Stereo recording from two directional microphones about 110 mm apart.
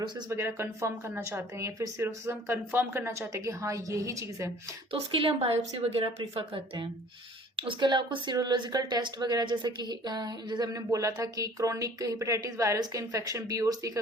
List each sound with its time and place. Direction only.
0.3 s a woman's voice: 20° right (ahead or behind)
4.9 s a woman's voice: 55° right (ahead or behind); by 14.0 s 30° right (ahead or behind)